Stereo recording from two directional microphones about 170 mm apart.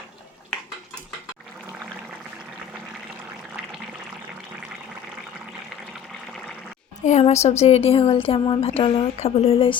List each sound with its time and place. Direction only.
7.0 s a woman's voice: 40° left (ahead or behind)